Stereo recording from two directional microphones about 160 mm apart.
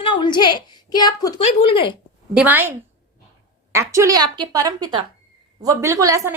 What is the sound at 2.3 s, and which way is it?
A woman's voice, 10° right (ahead or behind).